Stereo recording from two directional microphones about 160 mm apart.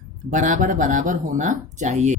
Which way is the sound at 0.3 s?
55° right (ahead or behind).